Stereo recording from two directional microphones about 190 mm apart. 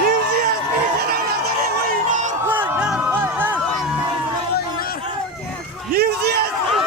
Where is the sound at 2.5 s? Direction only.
10° right (ahead or behind).